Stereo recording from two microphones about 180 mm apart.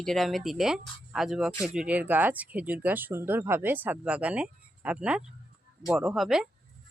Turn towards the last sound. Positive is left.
turn(degrees=-5)  # may be behind; listen again after turning